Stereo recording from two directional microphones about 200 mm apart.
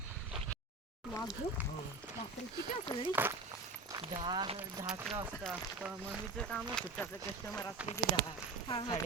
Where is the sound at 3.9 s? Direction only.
25° right (ahead or behind).